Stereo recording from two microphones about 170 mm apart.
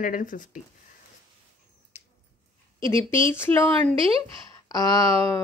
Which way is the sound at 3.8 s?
35° right (ahead or behind).